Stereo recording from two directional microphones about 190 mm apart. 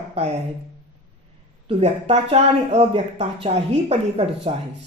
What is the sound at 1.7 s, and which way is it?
Speech, 35° right (ahead or behind).